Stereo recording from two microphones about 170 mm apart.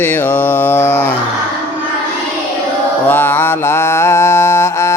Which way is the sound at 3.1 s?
15° left (ahead or behind).